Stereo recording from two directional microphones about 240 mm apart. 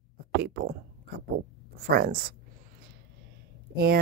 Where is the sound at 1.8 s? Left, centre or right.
Right.